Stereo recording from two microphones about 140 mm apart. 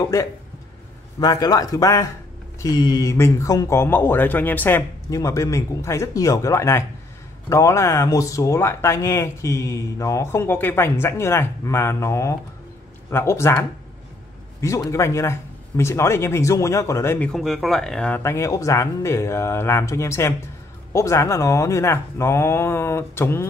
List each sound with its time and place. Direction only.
1.2 s speech: 25° left (ahead or behind)
17.3 s speech: centre (ahead or behind)
18.2 s speech: 20° left (ahead or behind)